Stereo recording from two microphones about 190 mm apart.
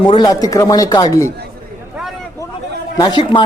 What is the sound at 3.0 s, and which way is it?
Speech, 25° left (ahead or behind).